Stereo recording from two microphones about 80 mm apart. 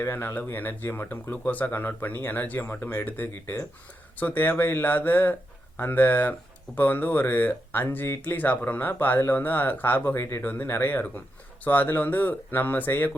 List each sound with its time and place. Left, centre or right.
0.0 s speech: left
8.2 s speech: left